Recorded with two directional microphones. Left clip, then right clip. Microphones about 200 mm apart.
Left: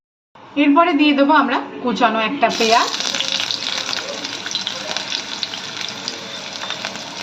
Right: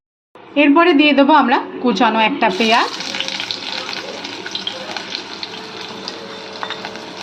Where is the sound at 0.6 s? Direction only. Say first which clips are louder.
Right 3 dB; 40° right (ahead or behind).